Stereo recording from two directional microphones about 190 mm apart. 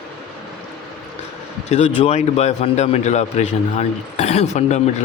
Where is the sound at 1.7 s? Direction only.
35° left (ahead or behind).